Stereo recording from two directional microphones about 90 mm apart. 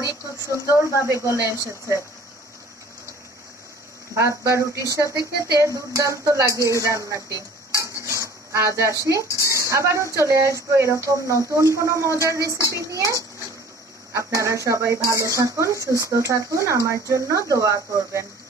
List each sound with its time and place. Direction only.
0.0 s speech: 35° left (ahead or behind)
0.9 s speech: 30° right (ahead or behind)
4.1 s speech: 35° right (ahead or behind)
7.7 s stir: 35° right (ahead or behind)
8.5 s speech: 35° right (ahead or behind)
14.1 s speech: 35° right (ahead or behind)